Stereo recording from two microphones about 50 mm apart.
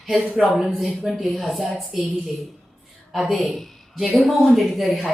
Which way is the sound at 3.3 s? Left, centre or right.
Centre.